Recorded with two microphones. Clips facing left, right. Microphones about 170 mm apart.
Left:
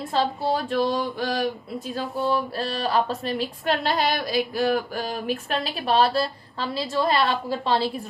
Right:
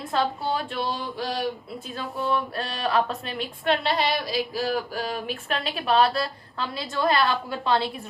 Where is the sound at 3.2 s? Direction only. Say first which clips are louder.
Left 5 dB; 35° left (ahead or behind).